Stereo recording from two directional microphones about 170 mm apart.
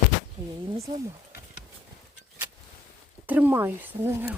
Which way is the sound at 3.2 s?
10° right (ahead or behind).